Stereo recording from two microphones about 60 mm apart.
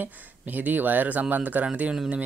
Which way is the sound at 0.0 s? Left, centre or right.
Right.